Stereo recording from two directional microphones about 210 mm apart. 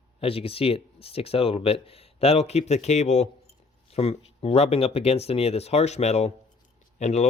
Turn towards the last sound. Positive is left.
turn(degrees=35)  # may be behind; listen again after turning